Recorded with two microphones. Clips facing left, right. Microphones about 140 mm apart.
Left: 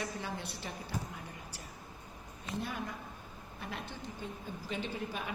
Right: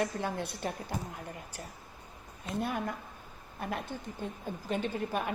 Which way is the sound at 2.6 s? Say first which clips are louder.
Right 6 dB; 55° right (ahead or behind).